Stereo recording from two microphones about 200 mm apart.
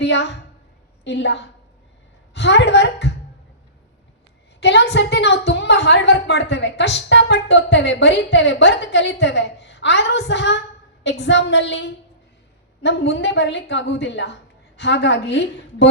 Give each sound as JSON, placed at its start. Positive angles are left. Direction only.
{"t": 0.0, "sound": "a woman's voice", "side_deg": 60}
{"t": 4.6, "sound": "a woman's voice", "side_deg": 55}